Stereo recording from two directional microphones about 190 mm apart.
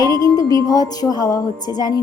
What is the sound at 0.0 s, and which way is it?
Music, 20° left (ahead or behind).